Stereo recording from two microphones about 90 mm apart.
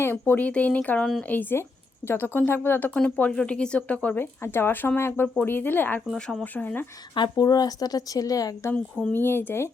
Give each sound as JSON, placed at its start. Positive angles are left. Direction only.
{"t": 0.0, "sound": "speech", "side_deg": 25}
{"t": 6.1, "sound": "speech", "side_deg": 5}
{"t": 6.4, "sound": "speech", "side_deg": 20}
{"t": 7.2, "sound": "speech", "side_deg": 45}
{"t": 8.7, "sound": "speech", "side_deg": 10}
{"t": 9.1, "sound": "speech", "side_deg": 25}